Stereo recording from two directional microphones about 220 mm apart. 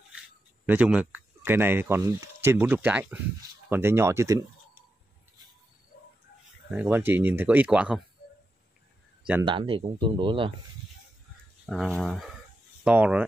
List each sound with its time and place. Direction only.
0.7 s speech: 5° right (ahead or behind)
6.7 s speech: 10° right (ahead or behind)
9.4 s speech: 25° right (ahead or behind)
11.6 s speech: centre (ahead or behind)